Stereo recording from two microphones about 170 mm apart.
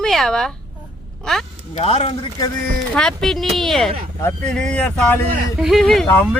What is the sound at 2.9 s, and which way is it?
Speech, 5° left (ahead or behind).